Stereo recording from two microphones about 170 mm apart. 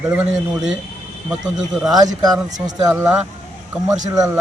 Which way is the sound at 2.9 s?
10° right (ahead or behind).